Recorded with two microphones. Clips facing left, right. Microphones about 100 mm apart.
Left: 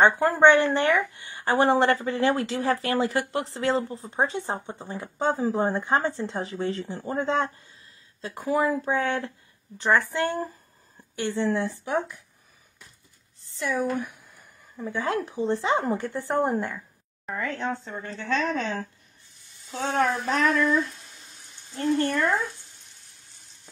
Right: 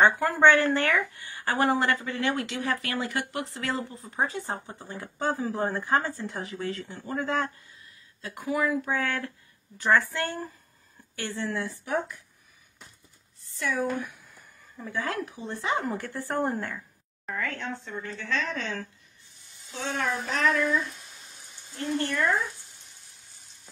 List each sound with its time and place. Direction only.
0.0 s a woman's voice: 25° left (ahead or behind)
13.5 s a woman's voice: 25° left (ahead or behind)
17.4 s speech: 40° left (ahead or behind)
19.7 s speech: 45° left (ahead or behind)